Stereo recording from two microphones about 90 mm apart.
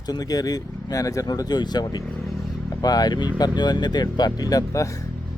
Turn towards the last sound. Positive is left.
turn(degrees=40)  # may be behind; listen again after turning